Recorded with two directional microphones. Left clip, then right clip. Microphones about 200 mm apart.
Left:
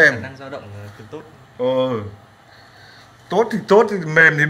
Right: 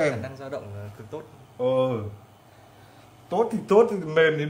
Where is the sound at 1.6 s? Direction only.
10° left (ahead or behind).